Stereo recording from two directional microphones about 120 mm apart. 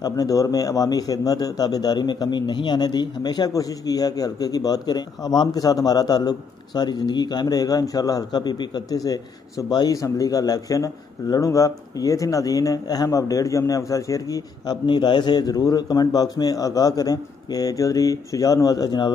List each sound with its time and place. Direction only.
0.0 s a man's voice: 30° left (ahead or behind)